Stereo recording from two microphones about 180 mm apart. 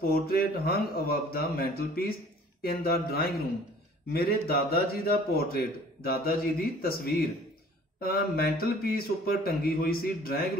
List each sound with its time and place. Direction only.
0.0 s speech: 55° left (ahead or behind)